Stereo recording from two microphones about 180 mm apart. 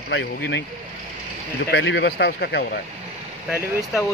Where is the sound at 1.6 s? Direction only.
70° left (ahead or behind).